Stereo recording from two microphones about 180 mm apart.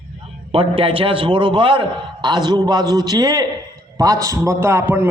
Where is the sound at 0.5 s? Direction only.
30° right (ahead or behind).